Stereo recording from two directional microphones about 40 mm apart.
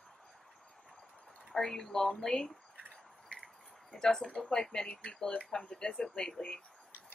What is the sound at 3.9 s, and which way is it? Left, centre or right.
Speech, centre.